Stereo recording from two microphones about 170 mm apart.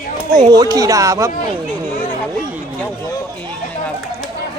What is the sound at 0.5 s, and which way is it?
Speech, 20° right (ahead or behind).